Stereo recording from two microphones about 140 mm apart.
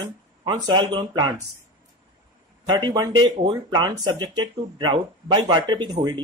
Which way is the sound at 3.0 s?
30° right (ahead or behind).